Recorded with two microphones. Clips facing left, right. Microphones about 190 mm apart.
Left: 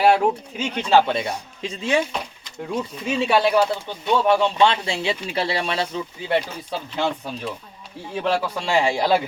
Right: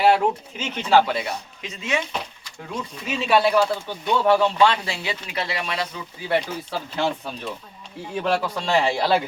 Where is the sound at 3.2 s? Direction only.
20° left (ahead or behind).